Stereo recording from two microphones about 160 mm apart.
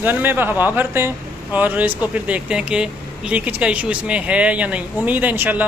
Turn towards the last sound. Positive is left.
turn(degrees=-10)  # may be behind; listen again after turning